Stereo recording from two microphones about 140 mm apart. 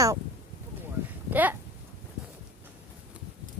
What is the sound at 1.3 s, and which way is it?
Speech, 10° right (ahead or behind).